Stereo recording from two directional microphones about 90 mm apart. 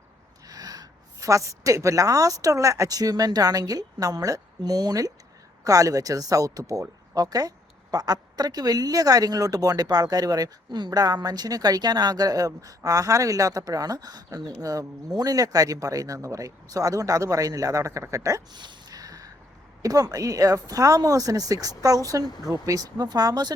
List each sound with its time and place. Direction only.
0.4 s a woman's voice: 45° right (ahead or behind)
18.5 s gasp: 55° right (ahead or behind)
19.8 s speech: 45° right (ahead or behind)